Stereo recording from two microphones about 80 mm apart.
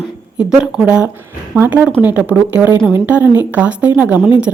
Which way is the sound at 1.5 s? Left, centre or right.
Right.